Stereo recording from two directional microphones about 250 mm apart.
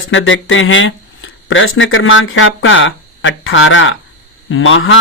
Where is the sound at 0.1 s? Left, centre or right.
Left.